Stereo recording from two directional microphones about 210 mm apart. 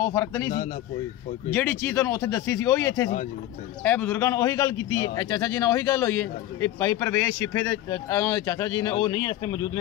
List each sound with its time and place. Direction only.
0.0 s a man's voice: 15° left (ahead or behind)
1.5 s a man's voice: 10° left (ahead or behind)